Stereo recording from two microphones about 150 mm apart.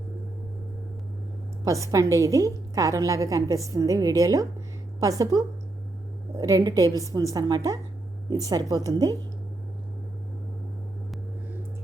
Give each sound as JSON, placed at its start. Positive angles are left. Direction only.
{"t": 1.6, "sound": "a woman's voice", "side_deg": -20}